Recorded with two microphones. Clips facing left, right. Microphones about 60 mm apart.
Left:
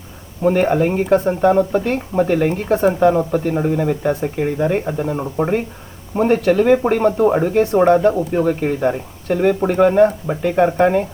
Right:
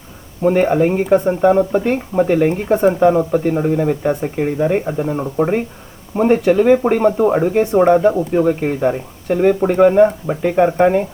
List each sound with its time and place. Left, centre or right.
0.4 s speech: centre